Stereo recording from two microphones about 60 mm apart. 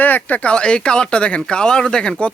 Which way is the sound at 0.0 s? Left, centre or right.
Left.